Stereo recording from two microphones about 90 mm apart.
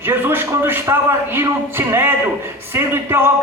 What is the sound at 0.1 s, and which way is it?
A man's voice, 25° right (ahead or behind).